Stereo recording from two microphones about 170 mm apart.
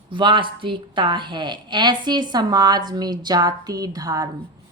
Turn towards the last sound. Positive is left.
turn(degrees=-20)  # may be behind; listen again after turning